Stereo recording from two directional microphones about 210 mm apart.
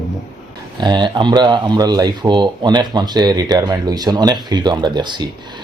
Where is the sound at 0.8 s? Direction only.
20° right (ahead or behind).